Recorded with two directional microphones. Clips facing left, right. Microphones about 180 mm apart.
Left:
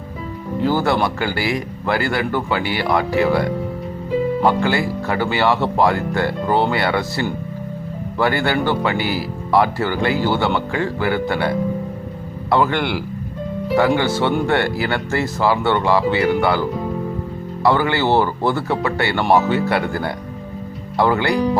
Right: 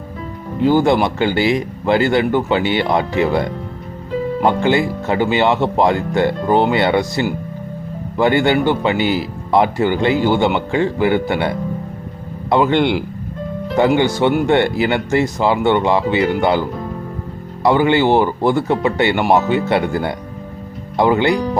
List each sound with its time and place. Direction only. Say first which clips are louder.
0.6 s speech: right 5 dB; 20° right (ahead or behind)